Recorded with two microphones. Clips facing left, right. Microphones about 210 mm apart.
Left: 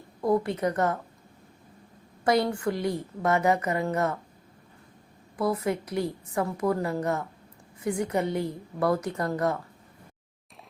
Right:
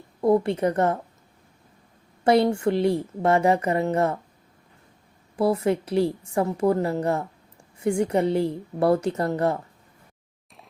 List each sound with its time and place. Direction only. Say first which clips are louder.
0.2 s a woman's voice: right 5 dB; 25° right (ahead or behind)
2.2 s a woman's voice: right 5 dB; 25° right (ahead or behind)
5.4 s a woman's voice: right 5 dB; 30° right (ahead or behind)